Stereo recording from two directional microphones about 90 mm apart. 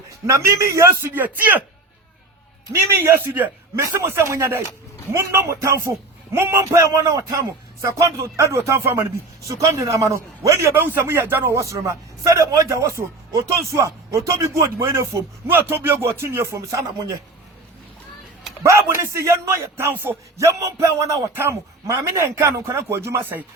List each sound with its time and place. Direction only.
0.3 s speech: 35° right (ahead or behind); by 1.6 s 20° right (ahead or behind)
3.2 s speech: 20° right (ahead or behind); by 17.2 s 35° right (ahead or behind)
18.6 s speech: 35° right (ahead or behind)
20.3 s speech: 35° right (ahead or behind)